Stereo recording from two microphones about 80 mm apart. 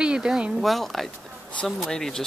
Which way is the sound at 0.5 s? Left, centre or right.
Centre.